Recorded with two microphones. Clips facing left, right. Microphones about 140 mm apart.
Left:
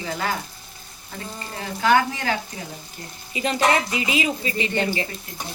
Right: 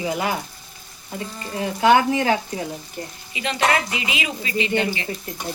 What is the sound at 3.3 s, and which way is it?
Speech, 40° left (ahead or behind).